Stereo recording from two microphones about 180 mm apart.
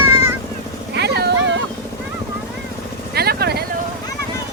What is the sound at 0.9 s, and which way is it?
Vehicle, 65° right (ahead or behind).